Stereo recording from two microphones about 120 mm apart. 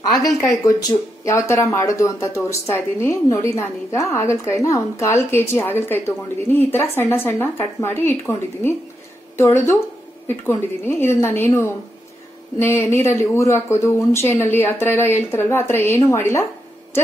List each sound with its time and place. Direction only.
0.0 s a woman's voice: 35° left (ahead or behind)